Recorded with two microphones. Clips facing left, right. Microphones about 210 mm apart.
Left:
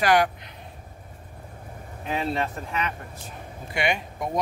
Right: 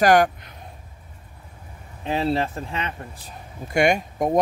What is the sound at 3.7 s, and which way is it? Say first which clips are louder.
Speech: right 7 dB; 45° right (ahead or behind).